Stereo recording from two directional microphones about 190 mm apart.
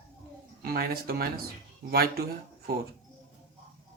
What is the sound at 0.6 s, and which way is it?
Speech, 55° right (ahead or behind).